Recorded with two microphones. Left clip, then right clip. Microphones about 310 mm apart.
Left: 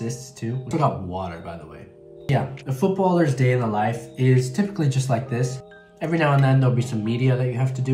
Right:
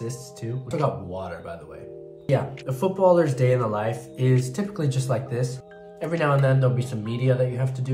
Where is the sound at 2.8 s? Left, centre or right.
Centre.